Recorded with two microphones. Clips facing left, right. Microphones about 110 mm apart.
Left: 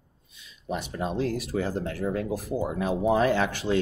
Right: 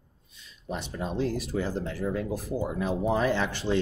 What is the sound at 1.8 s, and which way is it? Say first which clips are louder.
Speech: left 2 dB; 65° left (ahead or behind).